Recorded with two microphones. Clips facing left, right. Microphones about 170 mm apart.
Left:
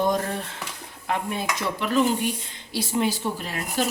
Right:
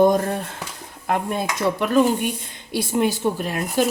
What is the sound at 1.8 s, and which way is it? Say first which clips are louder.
A woman's voice: right 3 dB; 50° right (ahead or behind).